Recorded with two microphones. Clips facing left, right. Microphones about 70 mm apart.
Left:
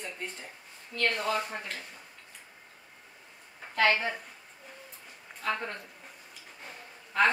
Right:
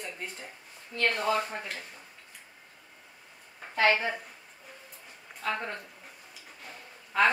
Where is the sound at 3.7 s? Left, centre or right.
Centre.